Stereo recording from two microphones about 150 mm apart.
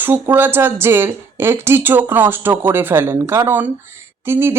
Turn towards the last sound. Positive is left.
turn(degrees=-15)  # may be behind; listen again after turning